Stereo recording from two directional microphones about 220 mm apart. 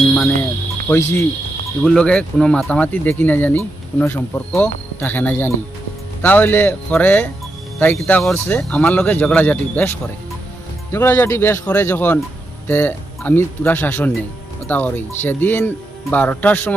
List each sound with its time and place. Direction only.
0.1 s cricket: 5° left (ahead or behind)
0.9 s speech: 10° left (ahead or behind)
10.9 s speech: 10° left (ahead or behind)